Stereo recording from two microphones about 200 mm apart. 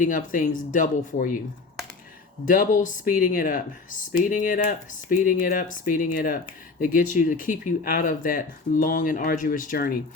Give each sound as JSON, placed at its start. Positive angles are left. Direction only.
{"t": 0.0, "sound": "speech", "side_deg": 40}
{"t": 2.5, "sound": "speech", "side_deg": 40}